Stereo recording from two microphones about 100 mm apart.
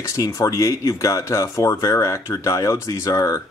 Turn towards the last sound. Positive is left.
turn(degrees=35)  # may be behind; listen again after turning